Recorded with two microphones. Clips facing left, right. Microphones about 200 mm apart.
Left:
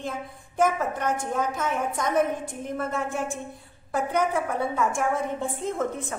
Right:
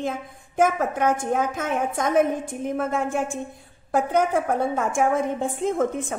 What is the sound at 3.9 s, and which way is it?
A woman's voice, 50° right (ahead or behind).